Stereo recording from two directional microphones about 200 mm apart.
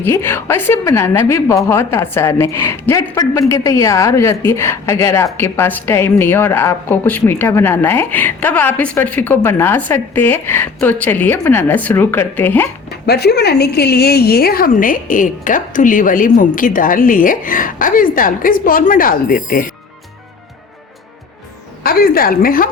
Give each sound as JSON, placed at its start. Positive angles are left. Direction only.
{"t": 0.0, "sound": "a woman's voice", "side_deg": 10}
{"t": 13.1, "sound": "a woman's voice", "side_deg": 55}
{"t": 21.8, "sound": "a woman's voice", "side_deg": 50}